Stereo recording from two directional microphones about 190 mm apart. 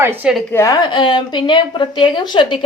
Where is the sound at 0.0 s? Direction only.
5° right (ahead or behind).